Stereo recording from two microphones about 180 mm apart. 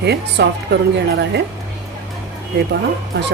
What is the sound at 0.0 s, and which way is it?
Speech, 70° right (ahead or behind).